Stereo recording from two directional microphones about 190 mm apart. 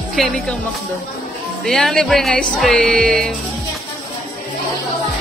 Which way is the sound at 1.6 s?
Centre (ahead or behind).